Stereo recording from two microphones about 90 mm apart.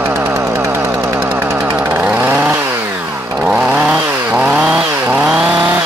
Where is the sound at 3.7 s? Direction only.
25° right (ahead or behind); by 5.6 s 5° right (ahead or behind).